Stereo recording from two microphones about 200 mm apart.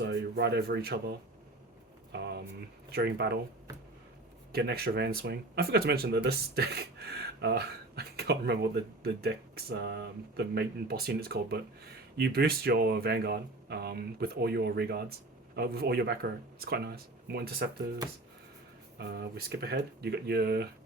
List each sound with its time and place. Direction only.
0.0 s speech: 55° right (ahead or behind)
2.1 s a sound: 55° right (ahead or behind)
2.9 s speech: 55° right (ahead or behind)
4.5 s speech: 50° right (ahead or behind)
18.9 s speech: 55° right (ahead or behind)